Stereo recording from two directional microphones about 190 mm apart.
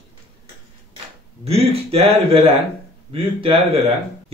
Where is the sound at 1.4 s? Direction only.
30° right (ahead or behind).